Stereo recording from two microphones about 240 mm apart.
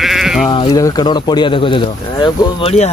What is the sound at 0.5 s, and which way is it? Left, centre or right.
Speech, centre.